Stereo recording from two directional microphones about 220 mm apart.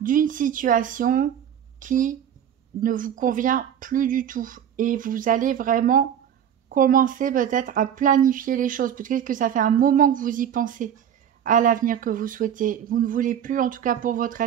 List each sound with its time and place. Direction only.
0.0 s speech: 40° right (ahead or behind)